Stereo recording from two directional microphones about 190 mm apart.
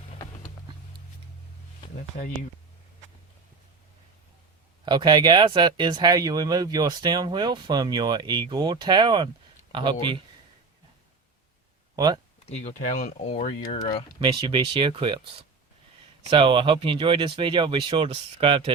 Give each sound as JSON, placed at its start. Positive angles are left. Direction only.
{"t": 4.9, "sound": "speech", "side_deg": -20}
{"t": 11.9, "sound": "speech", "side_deg": -20}
{"t": 12.5, "sound": "speech", "side_deg": 35}
{"t": 14.2, "sound": "speech", "side_deg": -25}